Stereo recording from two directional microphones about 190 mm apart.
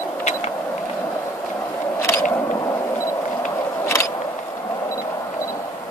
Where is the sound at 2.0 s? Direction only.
15° left (ahead or behind).